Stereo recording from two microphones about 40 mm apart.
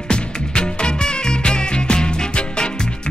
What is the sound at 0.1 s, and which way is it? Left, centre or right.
Music, left.